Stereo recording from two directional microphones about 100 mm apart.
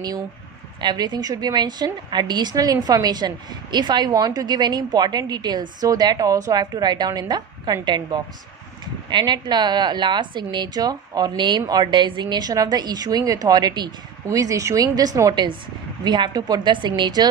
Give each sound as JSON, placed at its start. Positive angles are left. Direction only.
{"t": 0.7, "sound": "a woman's voice", "side_deg": -45}
{"t": 14.2, "sound": "a woman's voice", "side_deg": -35}